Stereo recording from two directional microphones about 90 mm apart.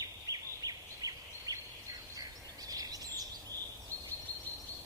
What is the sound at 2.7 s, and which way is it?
Bird, 45° right (ahead or behind).